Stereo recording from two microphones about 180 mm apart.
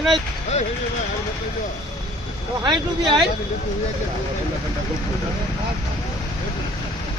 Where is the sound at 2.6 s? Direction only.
25° right (ahead or behind).